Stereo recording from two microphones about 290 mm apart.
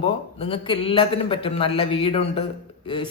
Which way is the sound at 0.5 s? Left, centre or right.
Centre.